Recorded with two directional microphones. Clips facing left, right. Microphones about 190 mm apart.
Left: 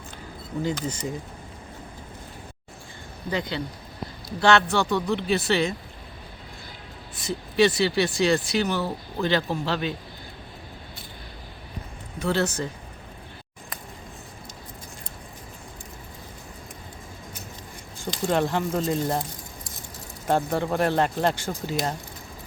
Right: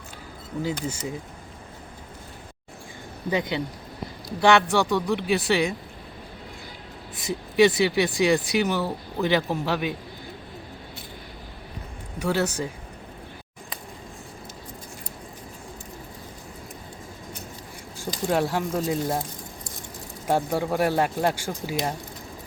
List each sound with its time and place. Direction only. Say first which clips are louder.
0.6 s speech: left 1 dB; 10° right (ahead or behind)
3.2 s speech: right 3 dB; 15° right (ahead or behind)
7.2 s speech: right 2 dB; 15° right (ahead or behind)
12.2 s speech: even; 10° right (ahead or behind)
18.3 s speech: even; 5° right (ahead or behind)
20.2 s speech: even; 10° right (ahead or behind)